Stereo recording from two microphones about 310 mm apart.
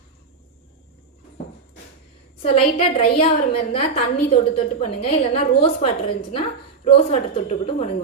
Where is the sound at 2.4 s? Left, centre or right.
Centre.